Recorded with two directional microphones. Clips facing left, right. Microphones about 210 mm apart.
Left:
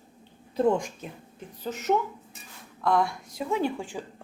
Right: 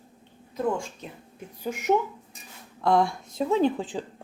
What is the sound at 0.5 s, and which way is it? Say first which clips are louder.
Speech: left 4 dB; 20° left (ahead or behind).